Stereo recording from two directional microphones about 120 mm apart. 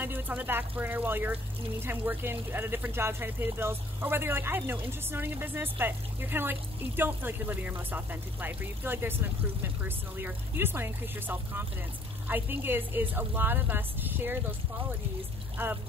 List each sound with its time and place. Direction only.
0.0 s speech: 15° right (ahead or behind)
15.5 s speech: 15° right (ahead or behind)